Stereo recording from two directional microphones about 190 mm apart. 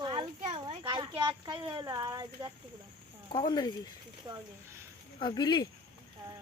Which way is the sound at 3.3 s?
20° left (ahead or behind).